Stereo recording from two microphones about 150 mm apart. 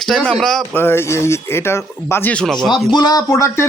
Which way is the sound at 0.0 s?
5° left (ahead or behind).